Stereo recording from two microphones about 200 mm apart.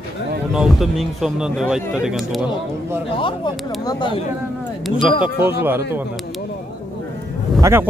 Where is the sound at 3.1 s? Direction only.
25° left (ahead or behind).